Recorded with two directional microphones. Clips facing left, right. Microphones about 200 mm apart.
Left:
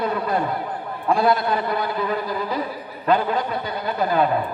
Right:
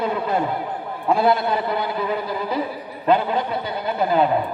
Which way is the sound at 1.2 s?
25° right (ahead or behind).